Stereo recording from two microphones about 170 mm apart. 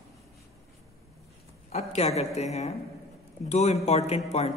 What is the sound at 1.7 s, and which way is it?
A man's voice, 40° left (ahead or behind).